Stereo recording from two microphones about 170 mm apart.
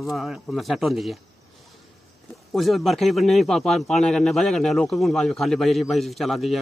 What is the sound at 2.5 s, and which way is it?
A man's voice, centre (ahead or behind).